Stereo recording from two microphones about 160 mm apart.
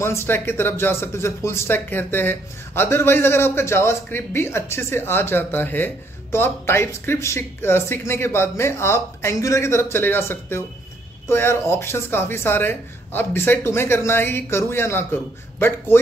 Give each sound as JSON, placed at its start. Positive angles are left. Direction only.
{"t": 0.0, "sound": "speech", "side_deg": 15}